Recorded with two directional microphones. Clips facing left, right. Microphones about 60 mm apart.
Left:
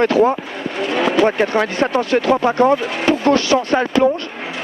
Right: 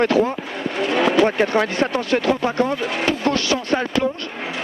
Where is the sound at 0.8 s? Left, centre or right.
Left.